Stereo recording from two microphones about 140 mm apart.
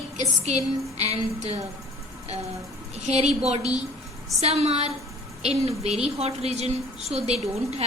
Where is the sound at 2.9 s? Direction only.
50° right (ahead or behind).